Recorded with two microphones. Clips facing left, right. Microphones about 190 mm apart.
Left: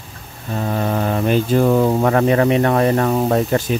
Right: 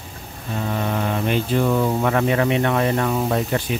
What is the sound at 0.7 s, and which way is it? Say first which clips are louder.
Speech: left 4 dB; 40° left (ahead or behind).